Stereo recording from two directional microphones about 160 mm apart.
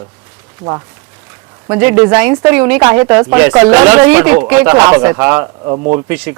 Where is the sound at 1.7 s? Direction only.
10° right (ahead or behind).